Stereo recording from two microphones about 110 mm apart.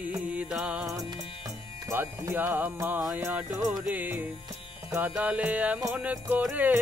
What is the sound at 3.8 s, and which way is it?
Music, 15° right (ahead or behind).